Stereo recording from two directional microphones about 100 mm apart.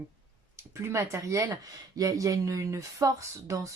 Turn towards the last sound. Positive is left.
turn(degrees=-35)  # may be behind; listen again after turning